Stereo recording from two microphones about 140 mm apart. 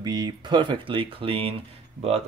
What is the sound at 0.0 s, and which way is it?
Speech, 30° right (ahead or behind).